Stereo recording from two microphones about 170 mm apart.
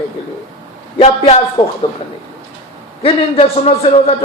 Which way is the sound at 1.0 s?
35° left (ahead or behind).